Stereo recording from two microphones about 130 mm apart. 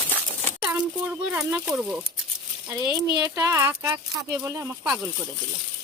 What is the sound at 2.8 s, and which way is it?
Speech, 35° right (ahead or behind).